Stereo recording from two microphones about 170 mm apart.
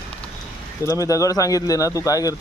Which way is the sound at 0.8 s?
20° left (ahead or behind).